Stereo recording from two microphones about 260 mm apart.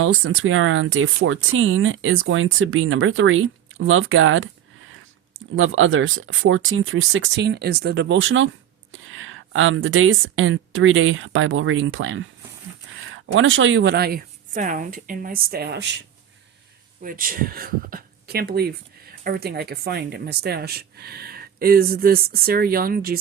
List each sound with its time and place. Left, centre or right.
0.0 s speech: right
5.5 s a woman's voice: right
13.2 s speech: right
17.0 s speech: right